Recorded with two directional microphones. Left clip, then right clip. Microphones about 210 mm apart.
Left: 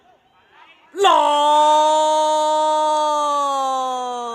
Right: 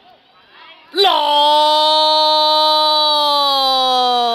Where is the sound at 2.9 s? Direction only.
25° right (ahead or behind).